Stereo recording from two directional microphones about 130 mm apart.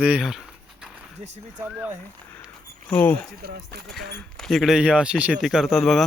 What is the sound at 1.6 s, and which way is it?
Speech, 10° right (ahead or behind).